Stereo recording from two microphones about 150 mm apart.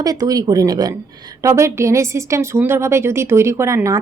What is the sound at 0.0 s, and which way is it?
Speech, 25° right (ahead or behind).